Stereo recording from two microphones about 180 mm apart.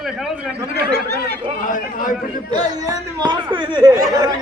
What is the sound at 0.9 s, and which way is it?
Speech, 65° right (ahead or behind).